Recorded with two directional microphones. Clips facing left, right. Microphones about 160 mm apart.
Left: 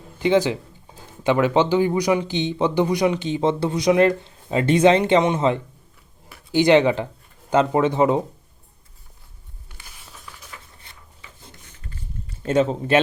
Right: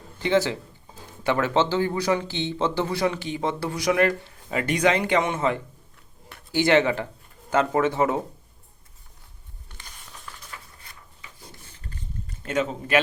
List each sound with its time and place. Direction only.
0.2 s speech: 15° left (ahead or behind)
9.7 s a sound: 5° left (ahead or behind)
12.5 s speech: 30° left (ahead or behind)